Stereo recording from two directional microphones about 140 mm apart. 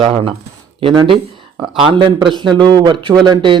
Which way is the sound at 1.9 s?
35° right (ahead or behind).